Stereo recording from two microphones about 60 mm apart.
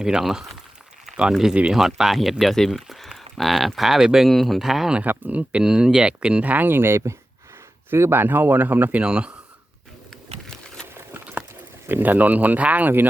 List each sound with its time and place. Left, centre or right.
0.0 s speech: centre
5.0 s speech: right
5.6 s speech: centre
10.4 s a sound: centre
11.1 s a sound: right
11.9 s speech: right